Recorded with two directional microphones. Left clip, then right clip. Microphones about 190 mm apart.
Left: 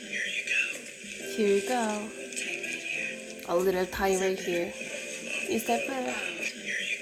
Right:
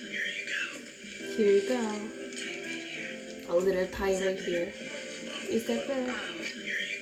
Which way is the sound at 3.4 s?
40° left (ahead or behind).